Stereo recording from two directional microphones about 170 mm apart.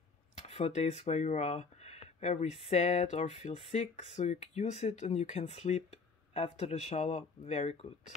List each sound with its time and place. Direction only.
0.4 s speech: 40° left (ahead or behind)